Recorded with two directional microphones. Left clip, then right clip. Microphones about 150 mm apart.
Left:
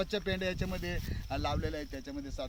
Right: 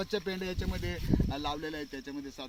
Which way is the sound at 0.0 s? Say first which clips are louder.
Left 1 dB; 10° left (ahead or behind).